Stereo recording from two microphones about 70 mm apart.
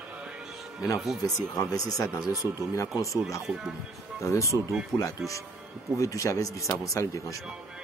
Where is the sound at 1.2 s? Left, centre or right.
Left.